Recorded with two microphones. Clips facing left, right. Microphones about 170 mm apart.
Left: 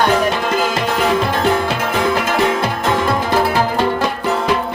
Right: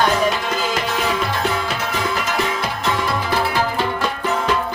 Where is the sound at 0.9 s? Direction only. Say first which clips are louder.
Left 5 dB; 55° left (ahead or behind).